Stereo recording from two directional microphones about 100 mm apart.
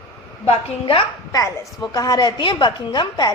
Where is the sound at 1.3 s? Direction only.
40° left (ahead or behind).